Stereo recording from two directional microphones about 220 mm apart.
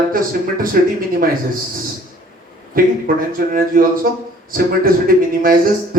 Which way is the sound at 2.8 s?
40° right (ahead or behind).